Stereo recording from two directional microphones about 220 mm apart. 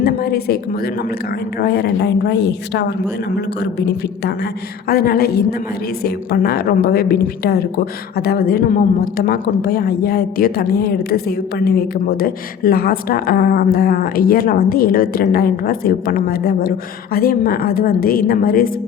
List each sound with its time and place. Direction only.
0.0 s a woman's voice: 45° left (ahead or behind)